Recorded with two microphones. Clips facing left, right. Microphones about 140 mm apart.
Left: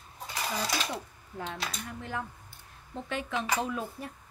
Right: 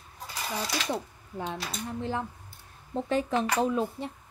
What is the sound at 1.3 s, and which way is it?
A woman's voice, 20° right (ahead or behind).